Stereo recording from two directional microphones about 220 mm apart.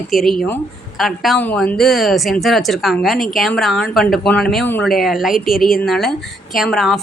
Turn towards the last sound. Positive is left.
turn(degrees=0)  # may be behind; listen again after turning